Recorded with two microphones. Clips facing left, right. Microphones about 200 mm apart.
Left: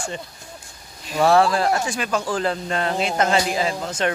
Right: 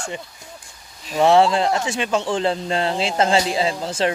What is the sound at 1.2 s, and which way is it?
A man's voice, 25° right (ahead or behind).